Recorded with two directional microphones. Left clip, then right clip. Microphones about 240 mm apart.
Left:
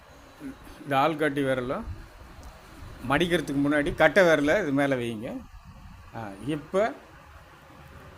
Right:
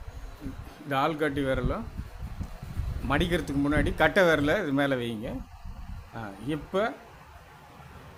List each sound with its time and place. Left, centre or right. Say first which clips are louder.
0.9 s speech: left 3 dB; centre
3.1 s speech: left 3 dB; centre